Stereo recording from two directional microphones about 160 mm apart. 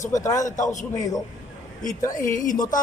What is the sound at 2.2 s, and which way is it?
Speech, 55° left (ahead or behind).